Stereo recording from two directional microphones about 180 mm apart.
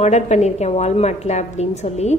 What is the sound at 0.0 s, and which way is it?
A woman's voice, 40° left (ahead or behind).